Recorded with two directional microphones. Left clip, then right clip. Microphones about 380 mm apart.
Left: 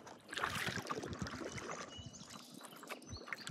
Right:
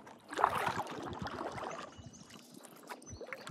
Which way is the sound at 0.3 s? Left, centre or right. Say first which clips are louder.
Right 8 dB; centre.